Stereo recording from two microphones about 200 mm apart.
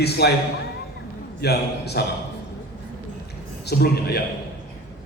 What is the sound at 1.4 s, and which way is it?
Speech, 55° left (ahead or behind).